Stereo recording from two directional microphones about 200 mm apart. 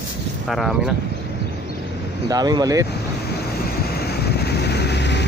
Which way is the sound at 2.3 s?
20° right (ahead or behind).